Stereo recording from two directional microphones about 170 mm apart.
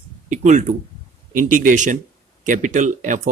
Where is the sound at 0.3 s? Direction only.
45° right (ahead or behind).